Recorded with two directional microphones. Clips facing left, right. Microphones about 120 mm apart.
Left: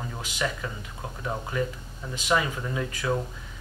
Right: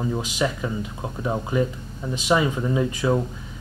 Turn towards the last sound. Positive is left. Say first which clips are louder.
# right 7 dB
turn(degrees=-20)  # may be behind; listen again after turning